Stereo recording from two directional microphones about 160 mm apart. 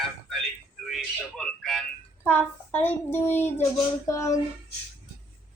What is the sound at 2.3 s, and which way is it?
A child's voice, 10° left (ahead or behind).